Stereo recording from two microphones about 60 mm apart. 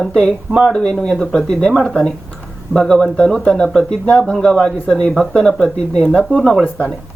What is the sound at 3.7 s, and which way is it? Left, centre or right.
Speech, centre.